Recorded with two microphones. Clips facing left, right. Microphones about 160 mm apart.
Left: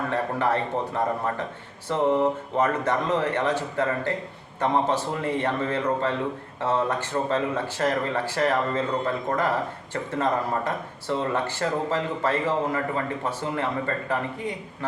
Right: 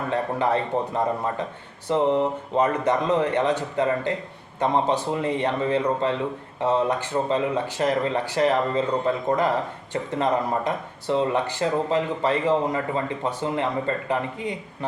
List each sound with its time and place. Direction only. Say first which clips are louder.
0.1 s a man's voice: right 3 dB; 20° right (ahead or behind)